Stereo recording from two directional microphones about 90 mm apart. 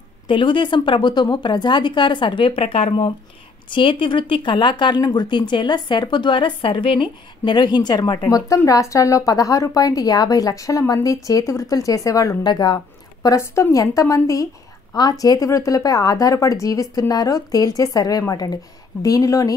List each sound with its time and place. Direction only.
0.3 s speech: 65° left (ahead or behind)
3.6 s speech: 70° left (ahead or behind); by 8.2 s 50° left (ahead or behind)
8.3 s a woman's voice: 40° left (ahead or behind)
12.4 s a woman's voice: 50° left (ahead or behind)